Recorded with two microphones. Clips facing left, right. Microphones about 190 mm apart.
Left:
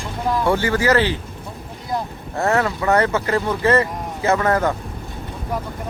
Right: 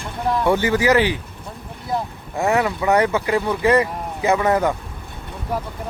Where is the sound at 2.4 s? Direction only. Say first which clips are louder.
Even; 15° right (ahead or behind).